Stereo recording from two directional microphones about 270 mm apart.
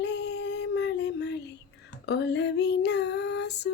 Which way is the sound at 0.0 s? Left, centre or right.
Left.